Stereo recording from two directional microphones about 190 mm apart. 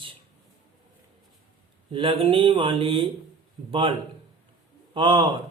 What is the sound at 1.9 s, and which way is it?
Speech, 30° right (ahead or behind).